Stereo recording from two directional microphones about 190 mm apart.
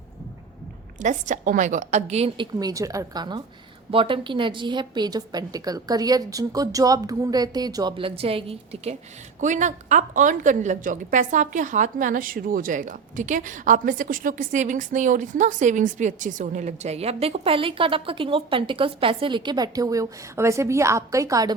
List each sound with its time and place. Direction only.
0.9 s a woman's voice: 40° right (ahead or behind)
2.6 s a woman's voice: 20° right (ahead or behind)